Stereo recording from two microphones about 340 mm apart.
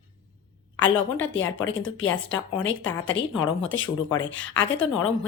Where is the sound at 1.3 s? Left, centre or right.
Left.